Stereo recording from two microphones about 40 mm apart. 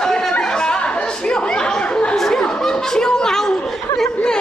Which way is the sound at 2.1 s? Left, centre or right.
Centre.